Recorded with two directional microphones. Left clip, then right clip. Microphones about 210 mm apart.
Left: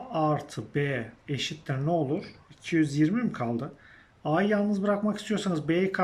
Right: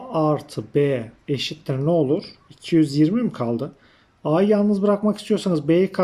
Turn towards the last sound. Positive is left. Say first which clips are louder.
# right 8 dB
turn(degrees=-20)  # may be behind; listen again after turning